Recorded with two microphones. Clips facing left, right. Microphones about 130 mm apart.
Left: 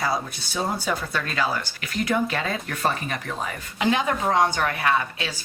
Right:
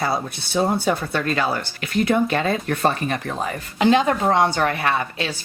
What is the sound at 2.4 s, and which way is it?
A woman's voice, 40° right (ahead or behind).